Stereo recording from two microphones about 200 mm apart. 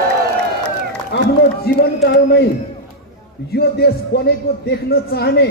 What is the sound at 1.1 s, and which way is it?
Run, 55° left (ahead or behind).